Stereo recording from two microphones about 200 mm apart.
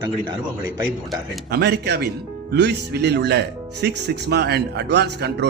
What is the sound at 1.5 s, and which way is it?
Speech, 55° right (ahead or behind).